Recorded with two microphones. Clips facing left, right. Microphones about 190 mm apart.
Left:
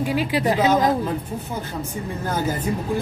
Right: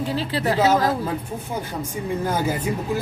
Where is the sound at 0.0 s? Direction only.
15° left (ahead or behind).